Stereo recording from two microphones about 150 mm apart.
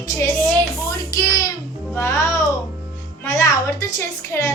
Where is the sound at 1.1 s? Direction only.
20° left (ahead or behind).